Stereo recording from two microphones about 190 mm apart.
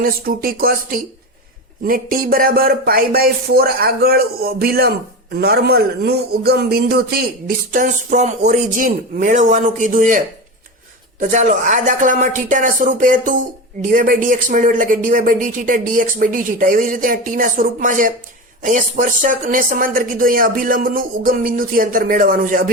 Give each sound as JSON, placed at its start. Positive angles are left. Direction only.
{"t": 0.0, "sound": "a man's voice", "side_deg": -50}
{"t": 7.7, "sound": "speech", "side_deg": -40}
{"t": 11.2, "sound": "speech", "side_deg": -40}